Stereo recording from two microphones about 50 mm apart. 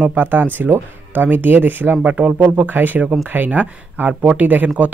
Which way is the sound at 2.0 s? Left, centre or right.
Right.